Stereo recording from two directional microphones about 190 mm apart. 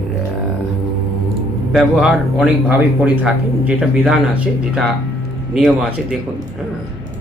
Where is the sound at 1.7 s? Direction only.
Centre (ahead or behind).